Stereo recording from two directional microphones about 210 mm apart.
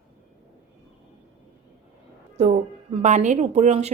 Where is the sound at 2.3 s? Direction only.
30° right (ahead or behind).